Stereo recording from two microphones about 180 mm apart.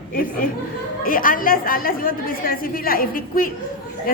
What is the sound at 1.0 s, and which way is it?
A woman's voice, 50° left (ahead or behind).